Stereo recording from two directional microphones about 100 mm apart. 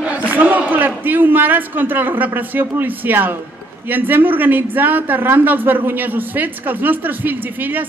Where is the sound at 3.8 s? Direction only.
20° right (ahead or behind).